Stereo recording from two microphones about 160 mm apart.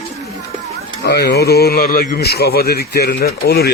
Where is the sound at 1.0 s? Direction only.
85° left.